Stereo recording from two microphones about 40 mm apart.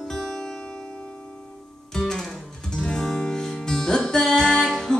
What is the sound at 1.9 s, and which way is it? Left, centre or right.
Music, centre.